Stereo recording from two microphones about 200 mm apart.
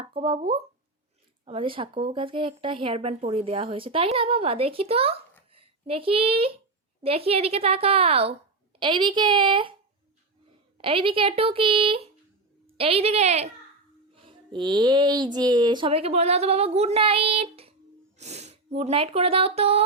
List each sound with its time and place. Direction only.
0.1 s a woman's voice: 25° right (ahead or behind)
10.8 s a woman's voice: 25° right (ahead or behind)